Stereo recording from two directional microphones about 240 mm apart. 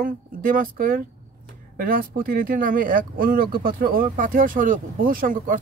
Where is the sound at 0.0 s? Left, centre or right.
Right.